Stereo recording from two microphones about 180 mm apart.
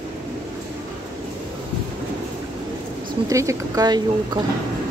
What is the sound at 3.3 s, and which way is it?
Speech, 20° right (ahead or behind).